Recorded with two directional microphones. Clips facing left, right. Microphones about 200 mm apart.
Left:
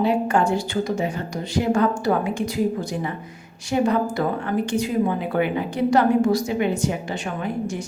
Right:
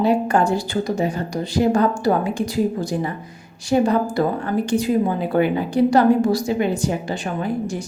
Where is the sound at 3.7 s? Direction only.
35° right (ahead or behind).